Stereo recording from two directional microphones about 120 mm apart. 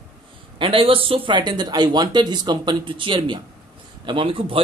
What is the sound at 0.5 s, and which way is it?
A man's voice, 50° right (ahead or behind).